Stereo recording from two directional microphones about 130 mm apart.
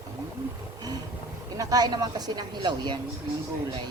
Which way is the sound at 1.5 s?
30° right (ahead or behind).